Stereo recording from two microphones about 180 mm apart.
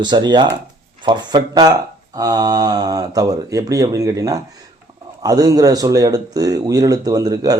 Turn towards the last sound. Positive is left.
turn(degrees=-20)  # may be behind; listen again after turning